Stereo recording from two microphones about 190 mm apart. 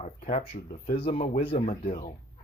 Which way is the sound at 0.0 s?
35° left (ahead or behind).